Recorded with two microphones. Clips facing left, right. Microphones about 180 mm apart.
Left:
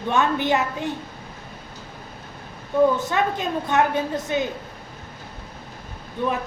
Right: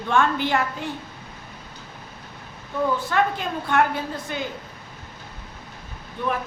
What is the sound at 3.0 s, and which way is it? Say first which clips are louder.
A woman's voice: even; 20° left (ahead or behind).